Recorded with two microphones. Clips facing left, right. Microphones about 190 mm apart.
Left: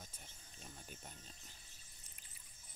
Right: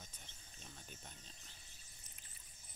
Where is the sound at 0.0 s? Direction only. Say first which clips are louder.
Left 2 dB; 10° left (ahead or behind).